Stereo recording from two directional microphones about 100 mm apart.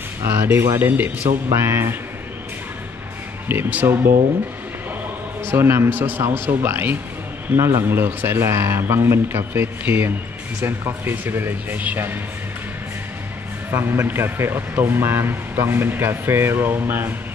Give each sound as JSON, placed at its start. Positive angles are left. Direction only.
{"t": 0.2, "sound": "speech", "side_deg": -20}
{"t": 3.4, "sound": "speech", "side_deg": -20}
{"t": 5.5, "sound": "speech", "side_deg": -25}
{"t": 13.7, "sound": "speech", "side_deg": -25}